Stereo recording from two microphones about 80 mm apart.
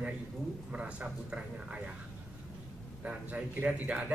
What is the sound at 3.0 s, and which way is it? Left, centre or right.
A man's voice, centre.